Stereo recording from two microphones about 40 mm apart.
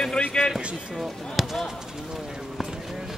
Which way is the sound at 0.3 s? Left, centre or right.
Left.